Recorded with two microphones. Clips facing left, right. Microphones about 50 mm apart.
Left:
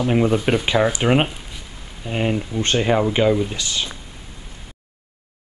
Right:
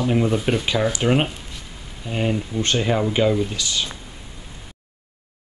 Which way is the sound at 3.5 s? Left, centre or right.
Left.